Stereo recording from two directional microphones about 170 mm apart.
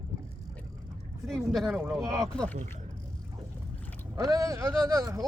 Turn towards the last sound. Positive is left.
turn(degrees=-20)  # may be behind; listen again after turning